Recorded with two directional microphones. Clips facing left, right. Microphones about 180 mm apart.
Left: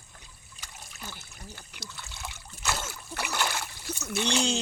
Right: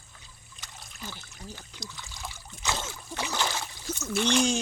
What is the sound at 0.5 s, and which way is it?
Trickle, 10° left (ahead or behind).